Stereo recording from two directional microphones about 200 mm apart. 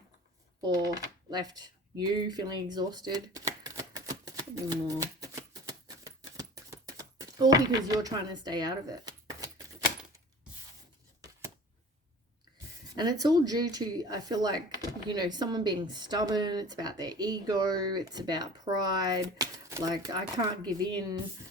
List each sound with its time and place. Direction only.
1.3 s speech: 20° right (ahead or behind)
4.9 s shuffling cards: 15° right (ahead or behind)
6.3 s a sound: 20° right (ahead or behind)
13.0 s speech: 20° right (ahead or behind)